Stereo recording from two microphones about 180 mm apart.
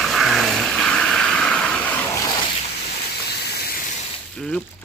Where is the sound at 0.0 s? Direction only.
Centre (ahead or behind).